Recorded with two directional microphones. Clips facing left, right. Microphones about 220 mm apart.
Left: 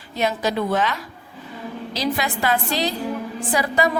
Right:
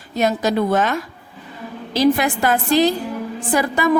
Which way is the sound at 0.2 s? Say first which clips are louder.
Right 4 dB; 45° right (ahead or behind).